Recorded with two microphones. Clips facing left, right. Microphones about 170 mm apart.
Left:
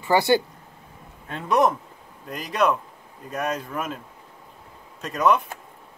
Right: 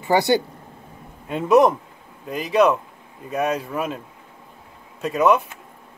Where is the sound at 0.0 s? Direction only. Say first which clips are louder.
Right 1 dB; 20° right (ahead or behind).